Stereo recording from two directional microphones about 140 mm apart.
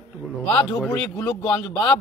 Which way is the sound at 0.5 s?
30° left (ahead or behind).